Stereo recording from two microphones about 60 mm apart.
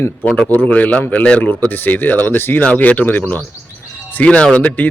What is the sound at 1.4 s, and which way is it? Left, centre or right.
Speech, left.